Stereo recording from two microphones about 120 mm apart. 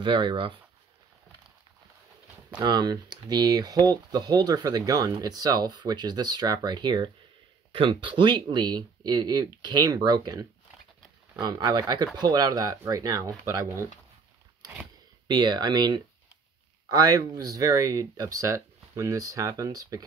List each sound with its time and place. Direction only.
0.0 s speech: 40° right (ahead or behind)
2.6 s speech: 35° right (ahead or behind)
15.2 s speech: 35° right (ahead or behind)